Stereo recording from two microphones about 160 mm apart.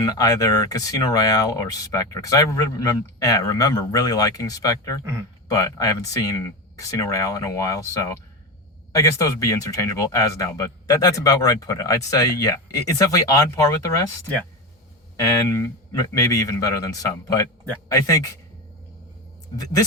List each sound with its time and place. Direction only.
0.0 s speech: 20° left (ahead or behind)
15.1 s speech: 20° left (ahead or behind)